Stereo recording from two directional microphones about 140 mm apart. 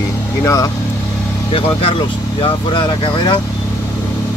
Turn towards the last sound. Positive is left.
turn(degrees=35)  # may be behind; listen again after turning